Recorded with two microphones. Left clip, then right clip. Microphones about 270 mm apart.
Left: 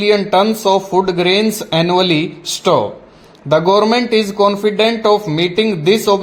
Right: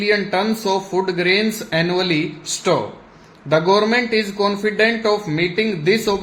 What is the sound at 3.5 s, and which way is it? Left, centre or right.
Speech, centre.